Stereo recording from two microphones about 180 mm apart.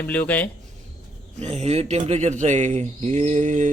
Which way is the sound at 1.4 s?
35° right (ahead or behind).